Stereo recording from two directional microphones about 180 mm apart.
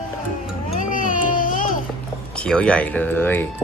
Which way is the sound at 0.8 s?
50° left (ahead or behind).